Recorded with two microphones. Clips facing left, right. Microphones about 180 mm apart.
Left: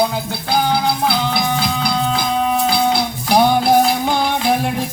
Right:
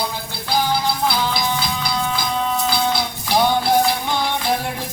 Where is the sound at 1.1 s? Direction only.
55° left (ahead or behind).